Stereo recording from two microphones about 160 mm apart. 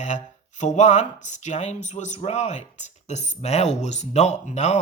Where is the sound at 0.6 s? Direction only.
45° left (ahead or behind).